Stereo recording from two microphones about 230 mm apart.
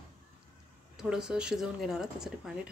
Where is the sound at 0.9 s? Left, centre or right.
Centre.